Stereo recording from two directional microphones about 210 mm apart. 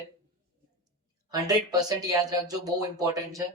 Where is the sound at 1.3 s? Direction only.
20° right (ahead or behind).